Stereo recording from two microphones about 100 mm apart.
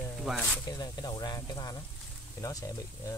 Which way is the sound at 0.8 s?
45° left (ahead or behind).